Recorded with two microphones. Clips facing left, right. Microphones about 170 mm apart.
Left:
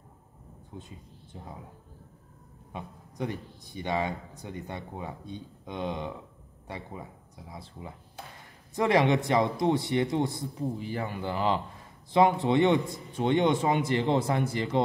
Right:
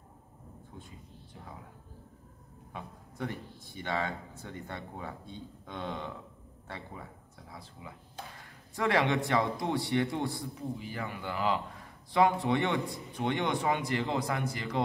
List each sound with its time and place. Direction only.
0.7 s a man's voice: 20° left (ahead or behind)
2.7 s speech: 20° left (ahead or behind)
8.7 s a man's voice: 20° left (ahead or behind)
10.8 s a man's voice: 30° left (ahead or behind)